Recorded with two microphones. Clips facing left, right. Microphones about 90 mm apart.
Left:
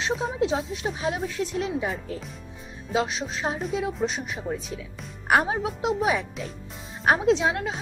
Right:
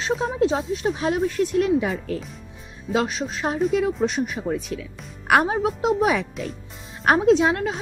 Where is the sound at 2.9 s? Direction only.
50° right (ahead or behind).